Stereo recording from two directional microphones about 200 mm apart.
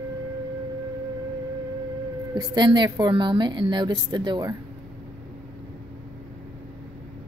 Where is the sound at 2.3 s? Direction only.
20° right (ahead or behind).